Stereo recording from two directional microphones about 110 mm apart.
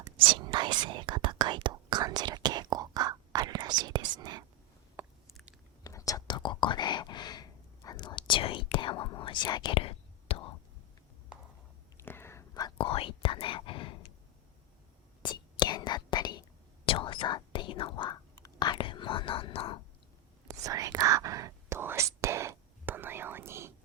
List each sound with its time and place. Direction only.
0.2 s whispering: 50° right (ahead or behind)
5.0 s biting: 15° right (ahead or behind)
5.8 s whispering: 30° left (ahead or behind); by 10.5 s 60° left (ahead or behind)
11.9 s whispering: 20° left (ahead or behind)
12.7 s whispering: 55° left (ahead or behind)
15.2 s whispering: 45° left (ahead or behind)
16.8 s whispering: 55° left (ahead or behind)
20.5 s whispering: 30° right (ahead or behind)